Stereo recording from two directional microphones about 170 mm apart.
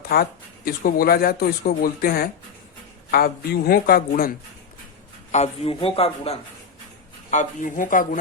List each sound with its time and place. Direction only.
0.1 s speech: 60° left (ahead or behind)
5.3 s a man's voice: 40° left (ahead or behind)
7.3 s speech: 50° left (ahead or behind)